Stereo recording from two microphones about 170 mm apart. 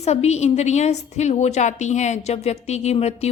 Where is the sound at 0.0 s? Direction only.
40° left (ahead or behind).